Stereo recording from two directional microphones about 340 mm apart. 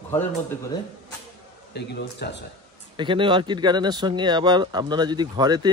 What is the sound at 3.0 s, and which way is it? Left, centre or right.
Speech, centre.